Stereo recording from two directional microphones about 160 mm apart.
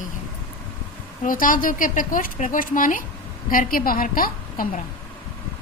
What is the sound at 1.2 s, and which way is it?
Speech, 60° left (ahead or behind).